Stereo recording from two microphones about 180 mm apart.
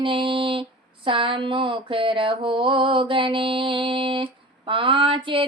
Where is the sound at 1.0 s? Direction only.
30° right (ahead or behind).